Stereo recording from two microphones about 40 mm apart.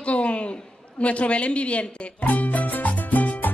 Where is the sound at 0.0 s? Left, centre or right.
Left.